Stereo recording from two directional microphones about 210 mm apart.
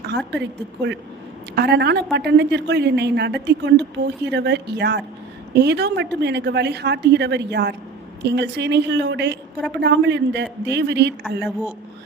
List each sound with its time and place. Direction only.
0.3 s a man's voice: 55° right (ahead or behind)
11.2 s a woman's voice: centre (ahead or behind)